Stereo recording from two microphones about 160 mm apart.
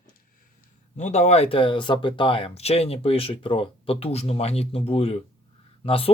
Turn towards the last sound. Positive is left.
turn(degrees=35)  # may be behind; listen again after turning